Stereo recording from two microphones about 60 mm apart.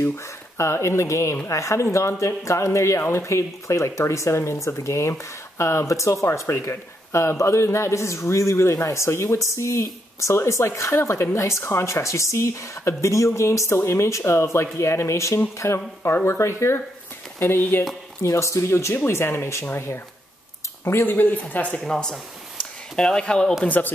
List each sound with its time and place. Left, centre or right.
0.0 s speech: left
17.4 s speech: left
18.2 s speech: left
21.7 s speech: centre
23.8 s speech: left